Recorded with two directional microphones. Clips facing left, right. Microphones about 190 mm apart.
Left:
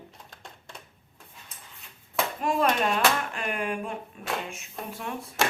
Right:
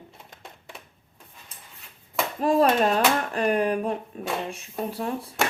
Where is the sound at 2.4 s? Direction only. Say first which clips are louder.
Right 6 dB; 35° right (ahead or behind).